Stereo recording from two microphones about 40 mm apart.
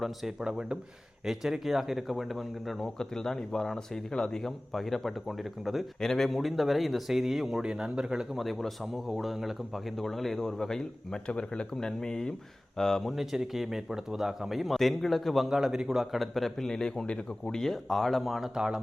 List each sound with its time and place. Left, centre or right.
0.0 s a man's voice: centre
0.3 s a man's voice: centre
3.0 s speech: centre
6.0 s a man's voice: centre
8.4 s a man's voice: centre
10.0 s speech: centre
13.1 s a man's voice: centre
15.4 s a man's voice: centre
16.1 s speech: centre; by 17.5 s left
17.5 s a man's voice: centre
18.5 s a man's voice: centre